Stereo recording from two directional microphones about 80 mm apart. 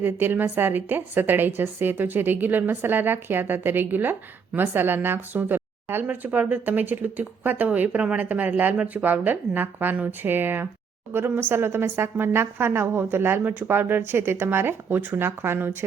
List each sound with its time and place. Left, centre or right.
0.0 s a woman's voice: right